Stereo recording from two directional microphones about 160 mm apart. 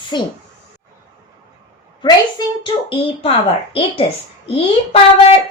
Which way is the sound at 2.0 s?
30° left (ahead or behind).